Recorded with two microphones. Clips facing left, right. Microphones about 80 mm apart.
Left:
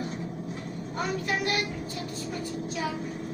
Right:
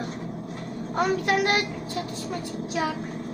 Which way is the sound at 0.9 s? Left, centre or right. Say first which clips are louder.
Right 7 dB; right.